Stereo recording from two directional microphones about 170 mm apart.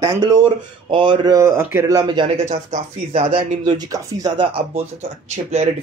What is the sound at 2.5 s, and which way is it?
Speech, 40° right (ahead or behind).